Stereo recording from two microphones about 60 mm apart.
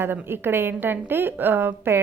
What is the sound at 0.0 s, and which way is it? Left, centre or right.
A woman's voice, right.